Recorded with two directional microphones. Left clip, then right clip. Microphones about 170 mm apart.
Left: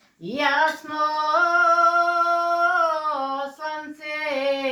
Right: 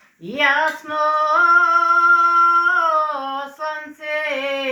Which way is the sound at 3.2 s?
5° right (ahead or behind).